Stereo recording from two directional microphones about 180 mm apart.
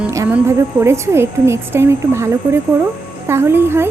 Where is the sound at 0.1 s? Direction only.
15° right (ahead or behind).